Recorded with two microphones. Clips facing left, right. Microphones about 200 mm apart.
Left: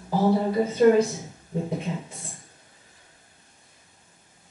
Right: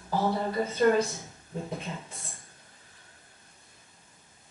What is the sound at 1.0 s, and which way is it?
Speech, 20° left (ahead or behind).